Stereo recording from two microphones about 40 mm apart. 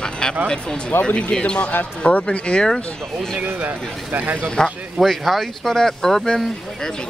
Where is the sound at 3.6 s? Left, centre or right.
Right.